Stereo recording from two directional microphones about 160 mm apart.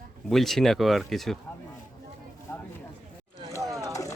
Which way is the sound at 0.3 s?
Centre (ahead or behind).